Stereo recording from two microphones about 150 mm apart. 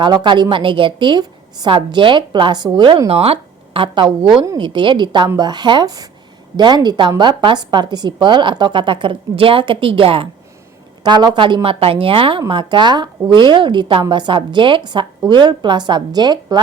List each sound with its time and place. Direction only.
0.0 s a woman's voice: 30° right (ahead or behind)